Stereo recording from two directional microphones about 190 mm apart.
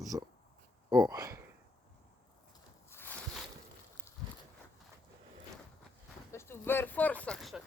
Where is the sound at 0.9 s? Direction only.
20° right (ahead or behind).